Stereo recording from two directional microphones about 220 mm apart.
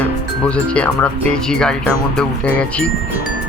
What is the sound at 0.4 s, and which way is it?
Speech, 5° left (ahead or behind).